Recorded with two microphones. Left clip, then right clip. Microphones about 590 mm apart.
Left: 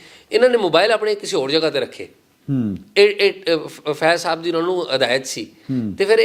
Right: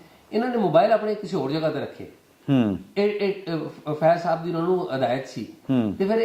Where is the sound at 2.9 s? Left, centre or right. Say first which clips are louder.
Left 10 dB; left.